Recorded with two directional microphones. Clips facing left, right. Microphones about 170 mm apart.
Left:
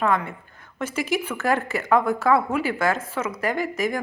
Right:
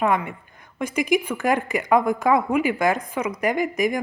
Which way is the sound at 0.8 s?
15° right (ahead or behind).